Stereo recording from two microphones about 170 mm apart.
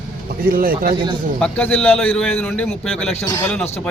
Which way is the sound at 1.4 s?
5° left (ahead or behind).